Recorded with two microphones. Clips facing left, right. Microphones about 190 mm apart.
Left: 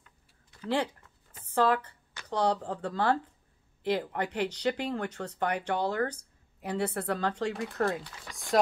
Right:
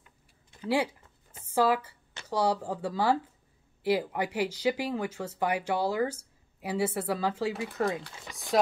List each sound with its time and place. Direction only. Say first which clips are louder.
0.0 s typing: right 2 dB; 20° right (ahead or behind)
0.7 s speech: right 2 dB; 10° right (ahead or behind)
8.1 s speech: right 1 dB; 25° right (ahead or behind)